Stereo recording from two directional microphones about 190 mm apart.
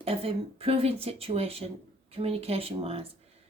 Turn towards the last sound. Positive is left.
turn(degrees=-30)  # may be behind; listen again after turning